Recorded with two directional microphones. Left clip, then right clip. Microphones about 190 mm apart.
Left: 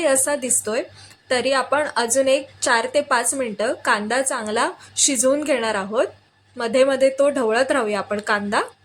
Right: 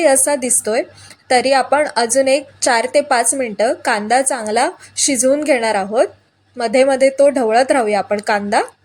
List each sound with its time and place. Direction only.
0.0 s a woman's voice: 15° right (ahead or behind)